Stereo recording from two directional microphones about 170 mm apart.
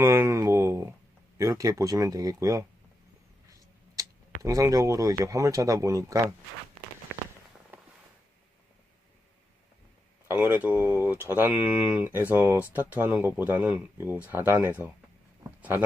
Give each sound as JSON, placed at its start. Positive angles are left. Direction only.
{"t": 0.0, "sound": "a sound", "side_deg": -15}
{"t": 1.4, "sound": "speech", "side_deg": -20}
{"t": 4.4, "sound": "speech", "side_deg": -20}
{"t": 10.2, "sound": "speech", "side_deg": -10}